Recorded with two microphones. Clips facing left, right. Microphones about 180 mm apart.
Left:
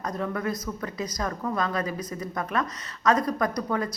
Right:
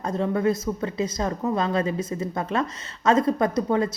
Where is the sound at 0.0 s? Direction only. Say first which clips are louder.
Right 6 dB; 25° right (ahead or behind).